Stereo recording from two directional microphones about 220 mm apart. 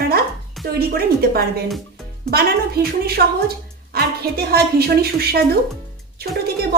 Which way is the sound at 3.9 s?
45° right (ahead or behind).